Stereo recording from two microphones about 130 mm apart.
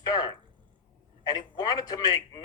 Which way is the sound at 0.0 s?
30° left (ahead or behind).